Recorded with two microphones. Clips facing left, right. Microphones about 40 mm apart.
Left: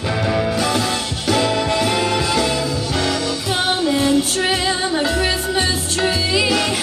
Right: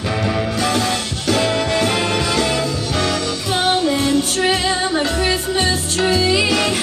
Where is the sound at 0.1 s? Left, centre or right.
Centre.